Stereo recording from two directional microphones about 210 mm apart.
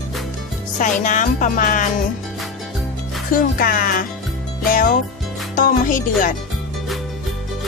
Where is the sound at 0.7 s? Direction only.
35° left (ahead or behind).